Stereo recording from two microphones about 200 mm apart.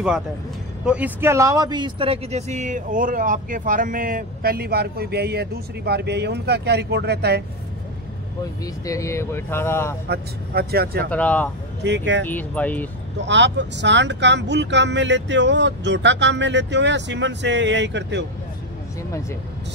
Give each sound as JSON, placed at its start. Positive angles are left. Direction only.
{"t": 0.8, "sound": "speech", "side_deg": -5}
{"t": 8.8, "sound": "speech", "side_deg": 15}
{"t": 10.0, "sound": "speech", "side_deg": -50}
{"t": 11.1, "sound": "speech", "side_deg": 5}
{"t": 11.8, "sound": "speech", "side_deg": -60}
{"t": 12.3, "sound": "speech", "side_deg": 10}
{"t": 13.2, "sound": "speech", "side_deg": -65}